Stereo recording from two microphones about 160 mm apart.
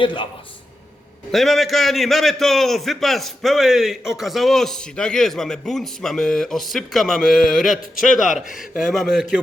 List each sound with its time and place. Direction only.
0.0 s a man's voice: 30° left (ahead or behind)
1.3 s a man's voice: centre (ahead or behind)